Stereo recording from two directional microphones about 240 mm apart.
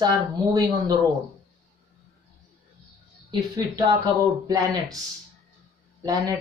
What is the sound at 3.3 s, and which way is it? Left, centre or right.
Speech, centre.